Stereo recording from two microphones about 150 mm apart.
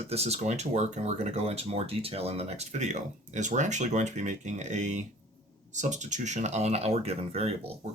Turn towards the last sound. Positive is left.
turn(degrees=-40)  # may be behind; listen again after turning